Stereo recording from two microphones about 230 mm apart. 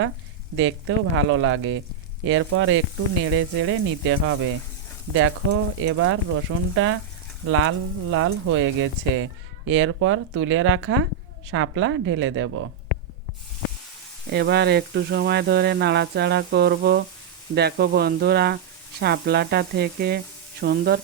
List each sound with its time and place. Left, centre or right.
0.5 s speech: right
14.3 s speech: right